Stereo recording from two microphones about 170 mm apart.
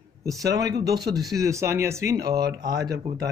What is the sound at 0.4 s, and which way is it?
Speech, 20° right (ahead or behind).